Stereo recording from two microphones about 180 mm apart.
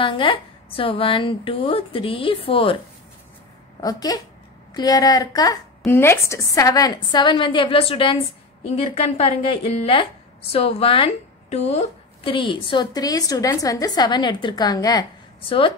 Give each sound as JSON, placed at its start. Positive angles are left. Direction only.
{"t": 0.0, "sound": "speech", "side_deg": 30}
{"t": 3.8, "sound": "a woman's voice", "side_deg": 20}